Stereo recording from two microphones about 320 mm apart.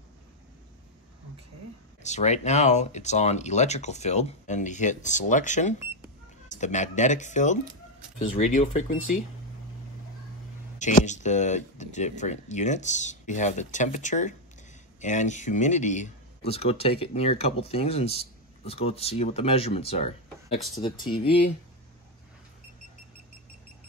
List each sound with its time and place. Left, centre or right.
2.0 s speech: left
10.8 s speech: left